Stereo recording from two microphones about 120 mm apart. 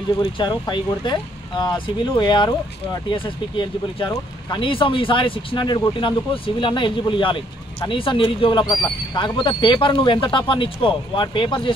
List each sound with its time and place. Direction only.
0.2 s speech: 40° left (ahead or behind)